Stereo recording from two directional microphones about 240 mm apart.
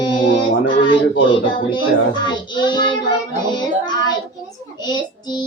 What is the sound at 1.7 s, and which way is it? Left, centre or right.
Child singing, centre.